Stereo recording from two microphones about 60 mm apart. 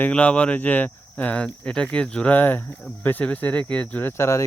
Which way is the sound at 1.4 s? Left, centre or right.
Centre.